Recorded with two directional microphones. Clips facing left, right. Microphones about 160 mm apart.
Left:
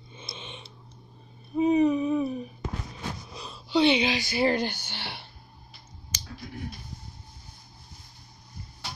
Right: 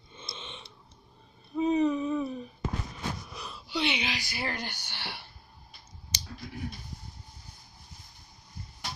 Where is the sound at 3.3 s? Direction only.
25° left (ahead or behind).